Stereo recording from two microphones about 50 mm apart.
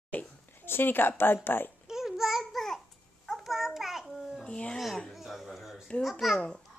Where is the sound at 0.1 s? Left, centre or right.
Left.